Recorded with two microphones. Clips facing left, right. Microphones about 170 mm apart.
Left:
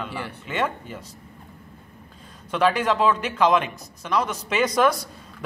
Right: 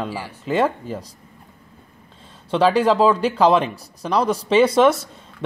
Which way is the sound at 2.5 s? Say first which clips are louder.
Right 5 dB; 30° right (ahead or behind).